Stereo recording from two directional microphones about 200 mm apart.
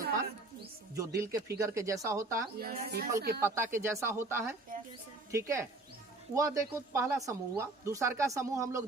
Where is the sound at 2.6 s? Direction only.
50° right (ahead or behind).